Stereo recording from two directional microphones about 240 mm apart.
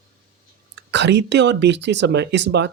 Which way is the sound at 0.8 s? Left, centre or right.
Right.